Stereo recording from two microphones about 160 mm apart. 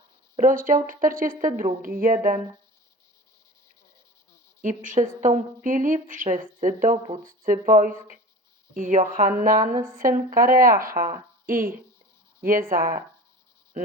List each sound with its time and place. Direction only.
0.3 s a woman's voice: 60° right (ahead or behind)
4.6 s a woman's voice: 55° right (ahead or behind)